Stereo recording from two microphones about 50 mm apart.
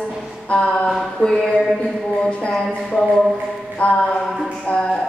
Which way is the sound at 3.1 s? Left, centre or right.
Centre.